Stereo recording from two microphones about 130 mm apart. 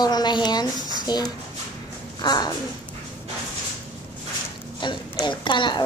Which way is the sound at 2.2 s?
30° left (ahead or behind).